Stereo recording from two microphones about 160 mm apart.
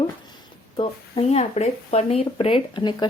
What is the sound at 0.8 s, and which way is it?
Speech, 40° left (ahead or behind).